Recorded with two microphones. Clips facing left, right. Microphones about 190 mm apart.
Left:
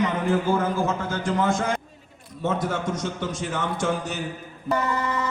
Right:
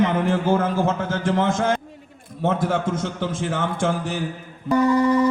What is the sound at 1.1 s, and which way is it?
Speech, 25° right (ahead or behind).